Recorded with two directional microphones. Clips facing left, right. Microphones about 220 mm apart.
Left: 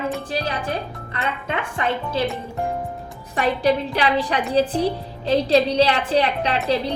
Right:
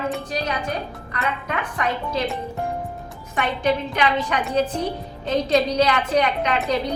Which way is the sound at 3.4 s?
35° left (ahead or behind).